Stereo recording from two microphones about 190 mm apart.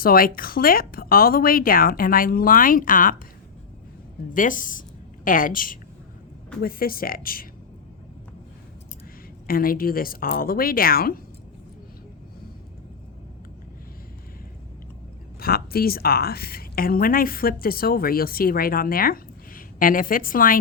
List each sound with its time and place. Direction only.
0.0 s a woman's voice: 50° left (ahead or behind)
4.4 s a woman's voice: 45° left (ahead or behind)
9.5 s a woman's voice: 50° left (ahead or behind)
15.4 s a woman's voice: 50° left (ahead or behind)